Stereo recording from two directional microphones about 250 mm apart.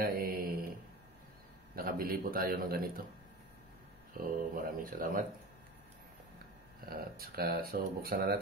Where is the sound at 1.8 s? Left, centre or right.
Right.